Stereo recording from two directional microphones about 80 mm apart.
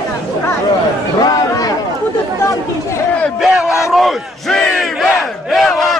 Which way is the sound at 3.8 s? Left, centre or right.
Centre.